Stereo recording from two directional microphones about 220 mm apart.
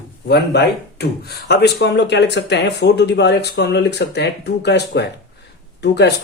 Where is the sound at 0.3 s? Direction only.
50° left (ahead or behind).